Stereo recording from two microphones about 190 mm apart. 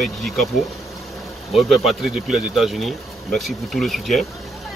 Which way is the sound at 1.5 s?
Centre (ahead or behind).